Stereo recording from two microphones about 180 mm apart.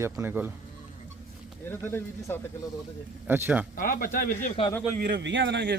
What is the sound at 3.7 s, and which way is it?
Speech, 50° left (ahead or behind).